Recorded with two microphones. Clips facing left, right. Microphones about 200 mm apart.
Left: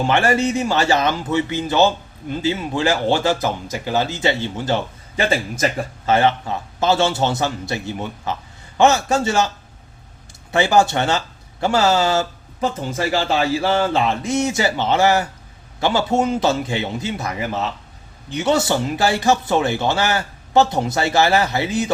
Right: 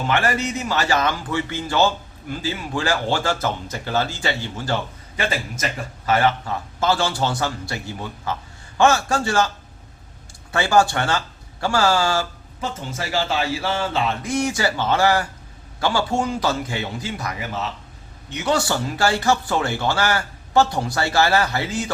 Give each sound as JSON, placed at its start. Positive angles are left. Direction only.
{"t": 0.0, "sound": "a man's voice", "side_deg": 25}
{"t": 10.5, "sound": "a man's voice", "side_deg": 20}
{"t": 12.5, "sound": "a man's voice", "side_deg": 35}